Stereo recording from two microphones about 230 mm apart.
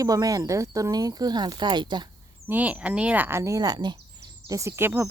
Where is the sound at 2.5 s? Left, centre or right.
Centre.